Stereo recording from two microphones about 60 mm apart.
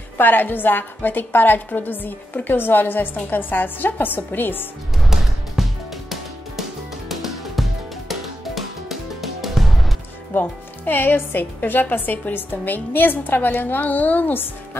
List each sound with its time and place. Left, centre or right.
0.2 s a woman's voice: left
4.9 s music: centre
10.3 s a woman's voice: left